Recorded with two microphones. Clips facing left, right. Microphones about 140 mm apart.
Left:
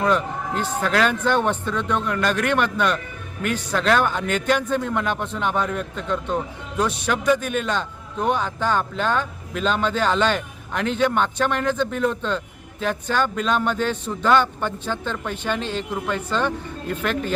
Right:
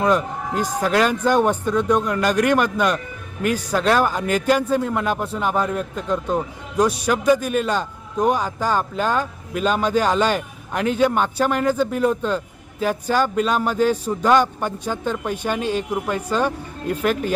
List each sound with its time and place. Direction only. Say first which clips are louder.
0.0 s speech: right 2 dB; 10° right (ahead or behind)